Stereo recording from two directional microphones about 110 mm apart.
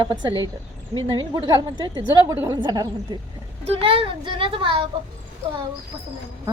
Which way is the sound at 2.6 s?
40° right (ahead or behind).